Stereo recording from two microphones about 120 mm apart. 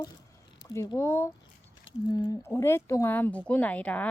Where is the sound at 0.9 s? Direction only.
20° left (ahead or behind).